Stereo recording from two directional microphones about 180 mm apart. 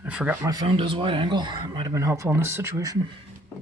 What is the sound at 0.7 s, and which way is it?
Speech, 30° right (ahead or behind).